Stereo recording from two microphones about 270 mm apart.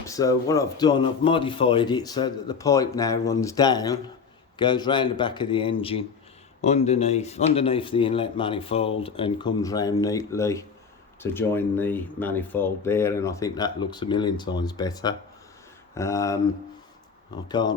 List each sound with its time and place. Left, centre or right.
0.0 s speech: centre